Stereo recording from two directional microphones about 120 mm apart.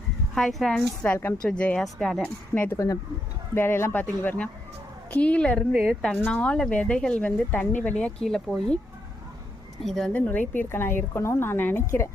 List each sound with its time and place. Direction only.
0.3 s speech: 5° left (ahead or behind)
1.0 s speech: 15° left (ahead or behind)
2.6 s speech: 25° left (ahead or behind)
5.7 s speech: 5° right (ahead or behind)
6.1 s speech: 15° left (ahead or behind)
9.8 s speech: centre (ahead or behind); by 12.0 s 20° left (ahead or behind)